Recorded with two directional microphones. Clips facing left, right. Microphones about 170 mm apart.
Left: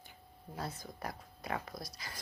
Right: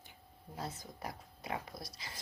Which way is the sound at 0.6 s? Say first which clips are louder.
Left 1 dB; 20° right (ahead or behind).